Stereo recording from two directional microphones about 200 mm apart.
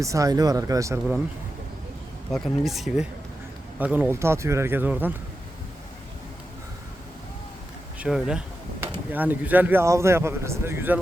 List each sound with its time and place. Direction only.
0.0 s speech: 15° right (ahead or behind)
2.3 s speech: centre (ahead or behind)
7.9 s speech: 5° right (ahead or behind)